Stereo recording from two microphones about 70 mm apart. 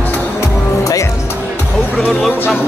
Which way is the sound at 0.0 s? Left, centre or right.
Left.